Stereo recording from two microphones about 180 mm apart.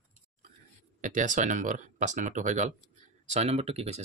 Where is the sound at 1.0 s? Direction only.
45° right (ahead or behind).